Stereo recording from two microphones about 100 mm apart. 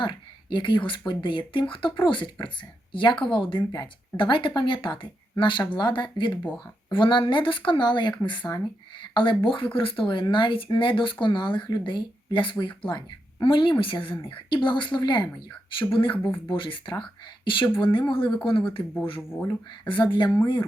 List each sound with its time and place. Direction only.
0.0 s speech: 55° left (ahead or behind)
19.3 s speech: 15° left (ahead or behind)
19.9 s speech: 50° left (ahead or behind)